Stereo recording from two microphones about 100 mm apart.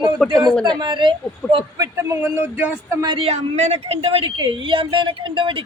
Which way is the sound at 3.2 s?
90° right.